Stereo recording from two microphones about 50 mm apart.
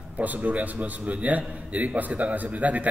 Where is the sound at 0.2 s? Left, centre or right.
Right.